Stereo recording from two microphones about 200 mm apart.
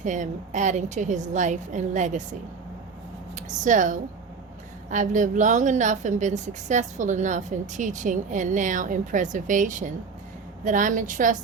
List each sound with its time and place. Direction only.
0.0 s a woman's voice: 40° right (ahead or behind)
3.3 s a woman's voice: 40° right (ahead or behind)